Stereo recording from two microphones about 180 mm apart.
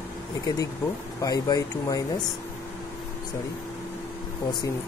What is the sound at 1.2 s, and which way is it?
Speech, 20° left (ahead or behind).